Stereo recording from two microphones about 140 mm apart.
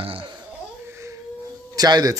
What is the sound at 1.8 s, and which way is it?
Speech, 30° right (ahead or behind).